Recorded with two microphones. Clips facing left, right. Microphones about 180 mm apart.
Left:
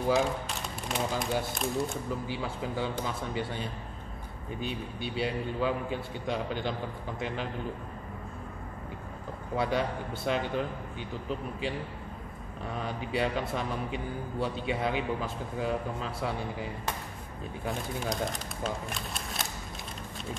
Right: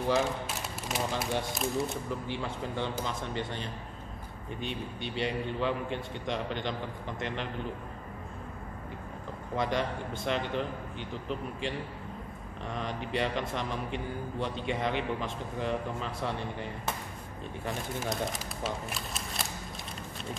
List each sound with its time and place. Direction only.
0.1 s a man's voice: centre (ahead or behind)
9.6 s a man's voice: 5° left (ahead or behind)